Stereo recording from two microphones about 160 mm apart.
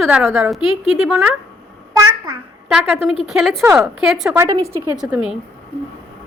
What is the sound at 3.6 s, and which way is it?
Speech, 15° right (ahead or behind).